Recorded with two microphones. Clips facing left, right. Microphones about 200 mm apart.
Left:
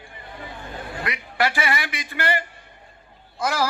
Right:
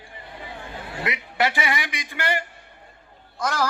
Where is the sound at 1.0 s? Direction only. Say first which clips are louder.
Even; 20° right (ahead or behind).